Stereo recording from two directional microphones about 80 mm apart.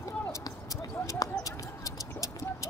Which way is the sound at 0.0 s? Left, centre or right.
Left.